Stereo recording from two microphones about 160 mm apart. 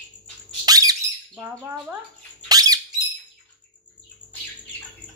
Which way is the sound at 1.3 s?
10° right (ahead or behind).